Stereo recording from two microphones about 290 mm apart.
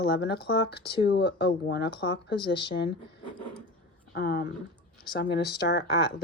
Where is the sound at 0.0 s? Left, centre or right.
Left.